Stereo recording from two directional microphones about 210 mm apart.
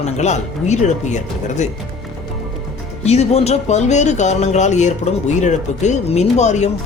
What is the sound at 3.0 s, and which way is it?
Speech, 30° left (ahead or behind).